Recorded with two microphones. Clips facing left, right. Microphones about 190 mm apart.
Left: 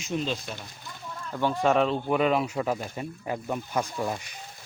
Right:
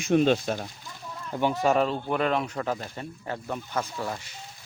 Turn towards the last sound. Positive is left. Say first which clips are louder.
# left 2 dB
turn(degrees=15)  # may be behind; listen again after turning